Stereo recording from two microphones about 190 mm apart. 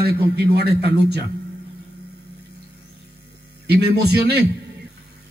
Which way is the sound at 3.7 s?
60° right (ahead or behind).